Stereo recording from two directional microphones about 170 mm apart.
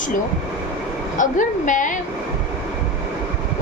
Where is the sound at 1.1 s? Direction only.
50° left (ahead or behind).